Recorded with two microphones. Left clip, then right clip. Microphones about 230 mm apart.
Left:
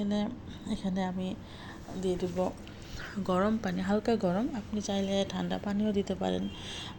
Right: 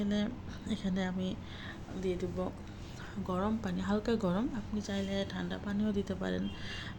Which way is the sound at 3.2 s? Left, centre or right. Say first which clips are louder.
Left 6 dB; left.